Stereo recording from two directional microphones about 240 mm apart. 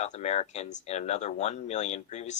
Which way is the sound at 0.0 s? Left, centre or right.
Left.